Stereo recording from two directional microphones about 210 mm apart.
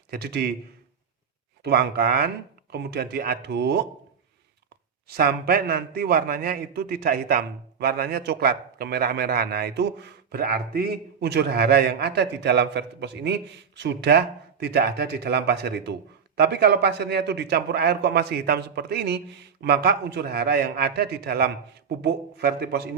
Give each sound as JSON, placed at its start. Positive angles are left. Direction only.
{"t": 0.1, "sound": "a man's voice", "side_deg": -50}
{"t": 1.6, "sound": "a man's voice", "side_deg": -45}
{"t": 5.0, "sound": "a man's voice", "side_deg": -45}